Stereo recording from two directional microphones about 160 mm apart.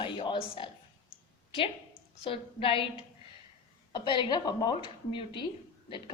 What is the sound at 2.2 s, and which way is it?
Speech, 35° left (ahead or behind).